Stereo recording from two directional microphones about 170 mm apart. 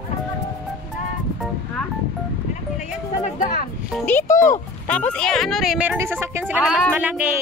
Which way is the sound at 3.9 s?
10° left (ahead or behind).